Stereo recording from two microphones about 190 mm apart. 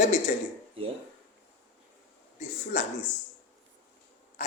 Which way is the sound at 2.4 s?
40° left (ahead or behind).